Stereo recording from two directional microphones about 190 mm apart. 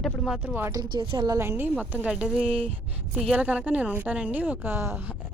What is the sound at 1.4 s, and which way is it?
A woman's voice, 10° right (ahead or behind).